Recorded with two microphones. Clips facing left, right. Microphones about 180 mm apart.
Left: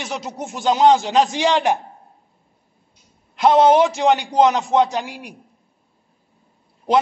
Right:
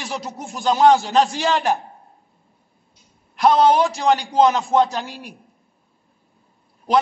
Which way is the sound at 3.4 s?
20° left (ahead or behind).